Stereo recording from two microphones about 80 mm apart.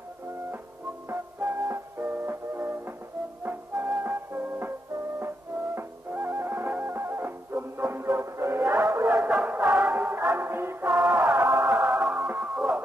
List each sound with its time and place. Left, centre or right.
1.0 s music: right
5.8 s music: right
9.1 s music: centre; by 11.6 s right
11.8 s music: centre